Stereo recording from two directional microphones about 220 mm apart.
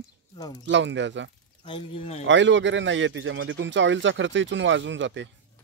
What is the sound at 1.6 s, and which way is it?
Speech, 25° left (ahead or behind).